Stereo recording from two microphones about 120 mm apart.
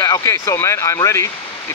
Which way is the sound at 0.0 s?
25° left (ahead or behind).